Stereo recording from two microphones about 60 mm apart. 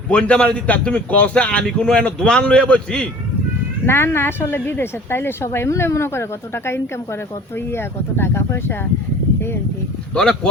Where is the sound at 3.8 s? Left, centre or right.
Left.